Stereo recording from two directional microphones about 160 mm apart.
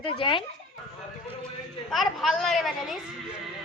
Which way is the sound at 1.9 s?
Centre (ahead or behind).